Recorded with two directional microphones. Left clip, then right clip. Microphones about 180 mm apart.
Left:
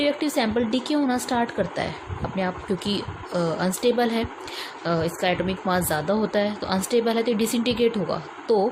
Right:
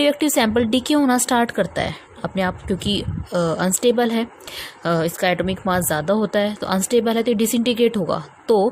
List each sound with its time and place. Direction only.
0.0 s speech: 55° right (ahead or behind)